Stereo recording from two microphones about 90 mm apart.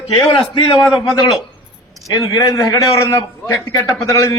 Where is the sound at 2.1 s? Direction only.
40° left (ahead or behind).